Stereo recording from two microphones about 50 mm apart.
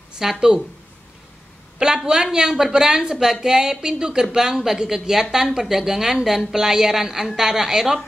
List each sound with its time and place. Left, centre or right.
0.2 s a woman's voice: centre
1.8 s a sound: centre
2.3 s a woman's voice: centre